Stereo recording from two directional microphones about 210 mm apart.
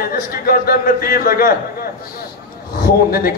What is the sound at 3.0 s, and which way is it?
Speech, 45° left (ahead or behind).